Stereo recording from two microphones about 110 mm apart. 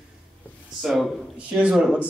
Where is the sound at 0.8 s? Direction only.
Centre (ahead or behind).